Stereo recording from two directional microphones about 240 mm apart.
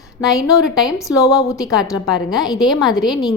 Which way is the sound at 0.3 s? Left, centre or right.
Centre.